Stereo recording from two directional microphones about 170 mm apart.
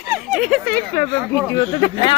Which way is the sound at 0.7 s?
15° left (ahead or behind).